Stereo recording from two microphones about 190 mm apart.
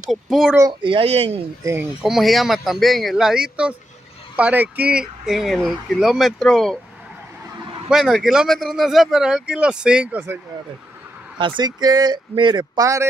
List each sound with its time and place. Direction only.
0.1 s speech: centre (ahead or behind)
0.6 s speech: 25° right (ahead or behind)
1.6 s speech: 10° right (ahead or behind)
7.9 s speech: centre (ahead or behind)
11.3 s speech: 25° right (ahead or behind)